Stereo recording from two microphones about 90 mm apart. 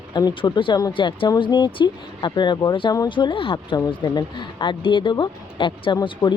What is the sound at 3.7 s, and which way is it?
Speech, 50° left (ahead or behind).